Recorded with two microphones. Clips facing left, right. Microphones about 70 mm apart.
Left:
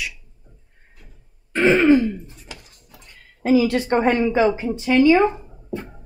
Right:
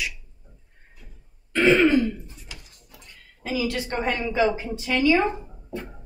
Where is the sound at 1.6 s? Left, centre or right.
Centre.